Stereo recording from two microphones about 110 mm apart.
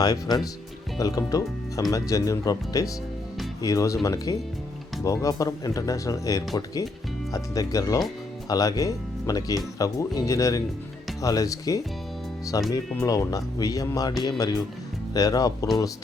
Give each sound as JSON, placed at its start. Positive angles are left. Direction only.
{"t": 0.0, "sound": "speech", "side_deg": 35}